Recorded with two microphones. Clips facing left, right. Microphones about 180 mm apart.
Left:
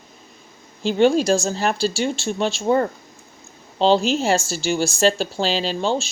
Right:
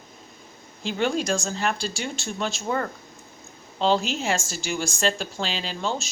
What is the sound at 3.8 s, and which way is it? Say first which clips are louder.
Speech: left 6 dB; 30° left (ahead or behind).